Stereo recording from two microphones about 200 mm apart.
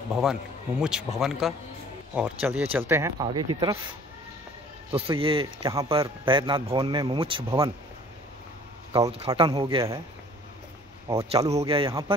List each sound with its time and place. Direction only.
0.1 s a man's voice: 5° right (ahead or behind); by 3.7 s 20° right (ahead or behind)
4.9 s speech: 25° right (ahead or behind)
7.4 s speech: 15° right (ahead or behind)
8.9 s speech: 20° right (ahead or behind)
11.1 s speech: 15° right (ahead or behind)
11.6 s speech: 25° right (ahead or behind)